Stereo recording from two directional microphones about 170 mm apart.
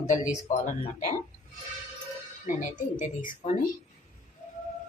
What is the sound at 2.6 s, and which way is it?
Speech, 50° left (ahead or behind).